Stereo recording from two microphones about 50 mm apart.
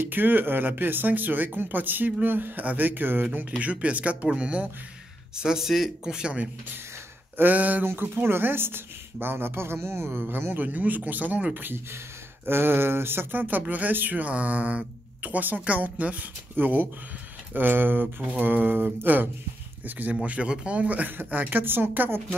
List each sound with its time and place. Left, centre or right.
0.0 s speech: right
3.3 s speech: right; by 6.1 s centre
6.1 s speech: centre
7.3 s speech: right
7.8 s speech: right
11.6 s speech: right
18.0 s speech: right
18.4 s speech: right
20.2 s speech: right